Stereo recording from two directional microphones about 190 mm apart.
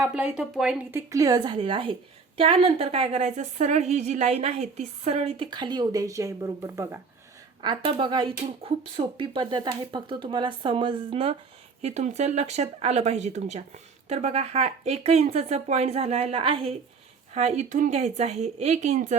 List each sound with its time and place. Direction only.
0.0 s speech: 5° right (ahead or behind)
0.9 s speech: 15° right (ahead or behind)
7.6 s speech: 25° right (ahead or behind)